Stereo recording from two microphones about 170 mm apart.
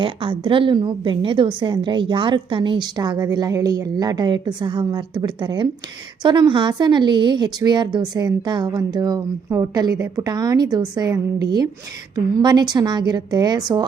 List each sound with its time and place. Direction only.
0.0 s a woman's voice: 30° right (ahead or behind)